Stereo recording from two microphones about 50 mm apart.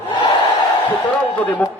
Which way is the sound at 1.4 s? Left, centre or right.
Left.